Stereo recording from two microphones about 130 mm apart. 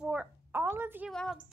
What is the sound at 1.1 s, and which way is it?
Speech, 5° left (ahead or behind).